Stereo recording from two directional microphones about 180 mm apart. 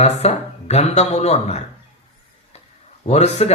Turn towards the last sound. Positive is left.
turn(degrees=35)  # may be behind; listen again after turning